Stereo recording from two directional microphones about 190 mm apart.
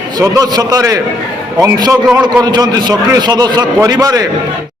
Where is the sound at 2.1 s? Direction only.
5° right (ahead or behind).